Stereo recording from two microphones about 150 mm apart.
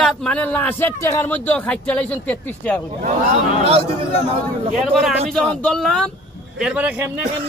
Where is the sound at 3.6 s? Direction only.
40° right (ahead or behind).